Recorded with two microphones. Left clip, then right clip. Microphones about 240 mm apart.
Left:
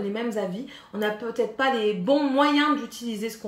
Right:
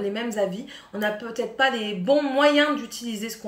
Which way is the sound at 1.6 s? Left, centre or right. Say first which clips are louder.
Right 2 dB; centre.